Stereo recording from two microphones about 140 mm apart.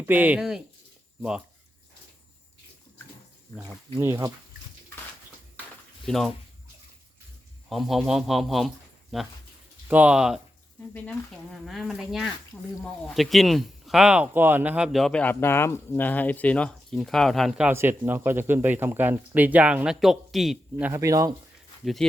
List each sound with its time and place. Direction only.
0.0 s speech: 10° right (ahead or behind)
3.9 s speech: 20° right (ahead or behind)
6.1 s speech: centre (ahead or behind)
7.7 s speech: centre (ahead or behind)
10.9 s speech: 10° left (ahead or behind); by 14.8 s 10° right (ahead or behind)
14.9 s speech: 5° left (ahead or behind)
17.7 s speech: 15° right (ahead or behind)
21.0 s speech: 25° right (ahead or behind)